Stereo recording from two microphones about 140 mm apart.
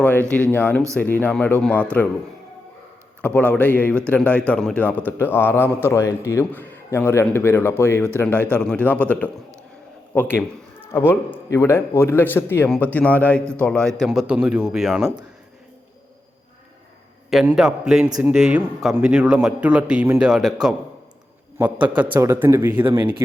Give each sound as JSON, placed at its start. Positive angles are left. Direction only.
{"t": 0.0, "sound": "a man's voice", "side_deg": 10}
{"t": 3.2, "sound": "a man's voice", "side_deg": 10}
{"t": 8.3, "sound": "speech", "side_deg": -15}
{"t": 8.6, "sound": "a man's voice", "side_deg": 10}
{"t": 14.0, "sound": "a man's voice", "side_deg": -5}
{"t": 17.2, "sound": "a man's voice", "side_deg": 0}